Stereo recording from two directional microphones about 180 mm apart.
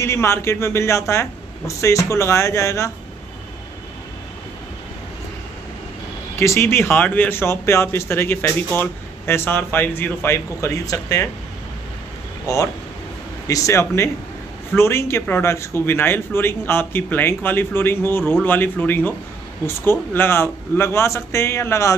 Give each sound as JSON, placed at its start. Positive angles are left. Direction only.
{"t": 0.0, "sound": "speech", "side_deg": 15}
{"t": 6.3, "sound": "speech", "side_deg": 15}
{"t": 13.5, "sound": "speech", "side_deg": 15}